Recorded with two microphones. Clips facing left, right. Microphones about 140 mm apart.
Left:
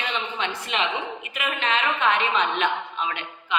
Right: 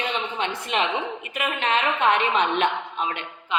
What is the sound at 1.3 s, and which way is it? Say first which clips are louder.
A woman's voice: right 2 dB; 45° right (ahead or behind).